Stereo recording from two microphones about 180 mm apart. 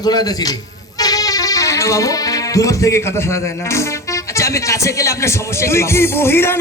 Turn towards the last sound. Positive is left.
turn(degrees=15)  # may be behind; listen again after turning